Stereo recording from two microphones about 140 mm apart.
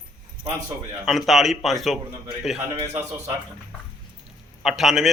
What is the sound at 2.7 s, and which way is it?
Speech, 20° right (ahead or behind).